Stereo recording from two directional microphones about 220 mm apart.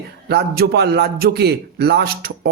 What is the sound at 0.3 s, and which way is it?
Speech, 45° right (ahead or behind).